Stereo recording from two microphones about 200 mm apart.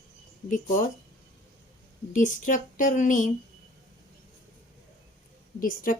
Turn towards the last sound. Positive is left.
turn(degrees=45)  # may be behind; listen again after turning